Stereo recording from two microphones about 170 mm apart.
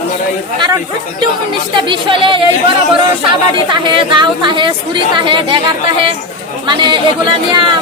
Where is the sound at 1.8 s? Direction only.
30° right (ahead or behind).